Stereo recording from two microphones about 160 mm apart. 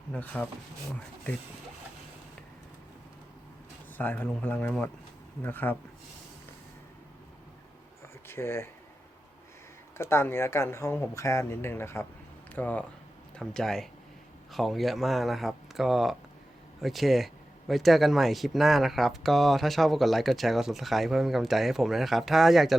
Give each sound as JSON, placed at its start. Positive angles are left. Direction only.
{"t": 0.3, "sound": "speech", "side_deg": 5}
{"t": 3.9, "sound": "speech", "side_deg": 10}
{"t": 8.3, "sound": "speech", "side_deg": 15}
{"t": 10.0, "sound": "speech", "side_deg": 15}